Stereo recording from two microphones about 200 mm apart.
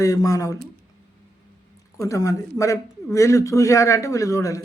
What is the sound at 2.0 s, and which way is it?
Speech, 15° left (ahead or behind).